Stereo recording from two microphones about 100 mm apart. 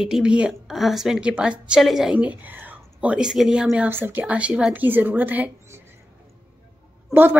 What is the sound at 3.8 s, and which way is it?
Speech, 20° right (ahead or behind).